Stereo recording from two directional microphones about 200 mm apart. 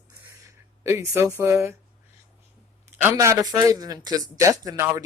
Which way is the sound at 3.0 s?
15° right (ahead or behind).